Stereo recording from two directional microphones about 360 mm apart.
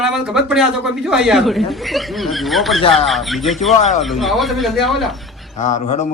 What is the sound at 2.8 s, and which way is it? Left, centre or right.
Speech, centre.